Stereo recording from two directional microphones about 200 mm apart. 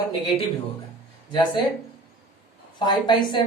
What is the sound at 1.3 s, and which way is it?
Speech, 25° left (ahead or behind).